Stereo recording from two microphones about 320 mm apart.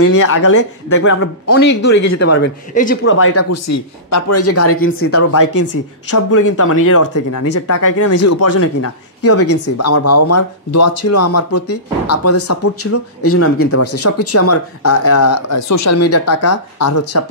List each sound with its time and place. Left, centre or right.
0.0 s speech: left
0.6 s speech: left
1.0 s a man's voice: left
3.0 s speech: left